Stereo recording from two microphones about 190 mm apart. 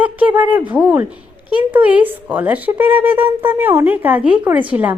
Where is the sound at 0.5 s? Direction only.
10° right (ahead or behind).